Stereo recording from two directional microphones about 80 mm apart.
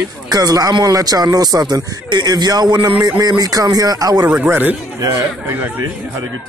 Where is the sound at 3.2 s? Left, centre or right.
Right.